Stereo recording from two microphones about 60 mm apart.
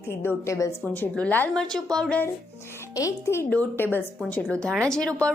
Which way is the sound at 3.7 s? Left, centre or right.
Left.